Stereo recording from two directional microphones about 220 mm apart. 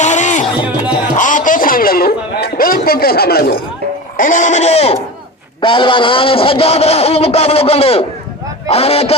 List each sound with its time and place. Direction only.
0.0 s music: 35° left (ahead or behind)
1.1 s a sound: 35° left (ahead or behind)
4.2 s a man's voice: 35° left (ahead or behind)